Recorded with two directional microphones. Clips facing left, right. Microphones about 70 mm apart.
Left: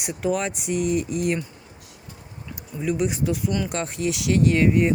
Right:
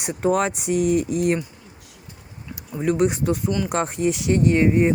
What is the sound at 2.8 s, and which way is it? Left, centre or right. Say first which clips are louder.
Speech: right 4 dB; right.